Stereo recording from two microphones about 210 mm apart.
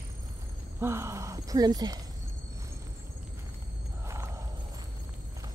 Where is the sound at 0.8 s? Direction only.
10° right (ahead or behind).